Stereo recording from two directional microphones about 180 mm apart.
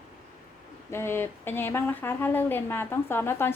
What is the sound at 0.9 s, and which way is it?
Speech, 15° left (ahead or behind).